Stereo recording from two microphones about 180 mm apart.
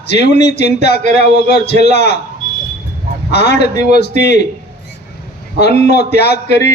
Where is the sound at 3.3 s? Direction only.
65° left (ahead or behind).